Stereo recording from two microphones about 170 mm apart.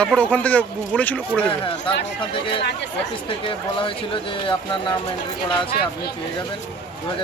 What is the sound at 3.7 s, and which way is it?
Speech, 30° left (ahead or behind).